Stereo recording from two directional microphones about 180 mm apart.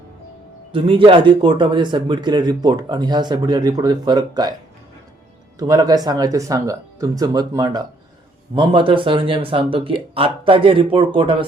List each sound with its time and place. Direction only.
0.7 s speech: 30° right (ahead or behind)
5.5 s speech: 20° right (ahead or behind)